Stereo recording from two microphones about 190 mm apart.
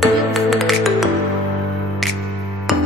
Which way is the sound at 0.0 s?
Centre (ahead or behind).